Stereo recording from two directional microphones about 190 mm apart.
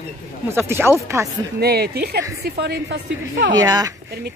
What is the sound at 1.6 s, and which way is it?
Speech, 55° right (ahead or behind).